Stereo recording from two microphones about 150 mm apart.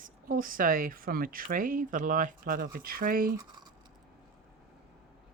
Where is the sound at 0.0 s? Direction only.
65° right (ahead or behind).